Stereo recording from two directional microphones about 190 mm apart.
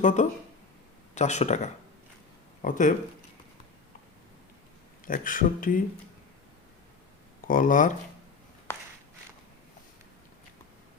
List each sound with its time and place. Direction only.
0.0 s speech: 40° left (ahead or behind)
5.0 s speech: 45° left (ahead or behind)
7.4 s speech: 45° left (ahead or behind)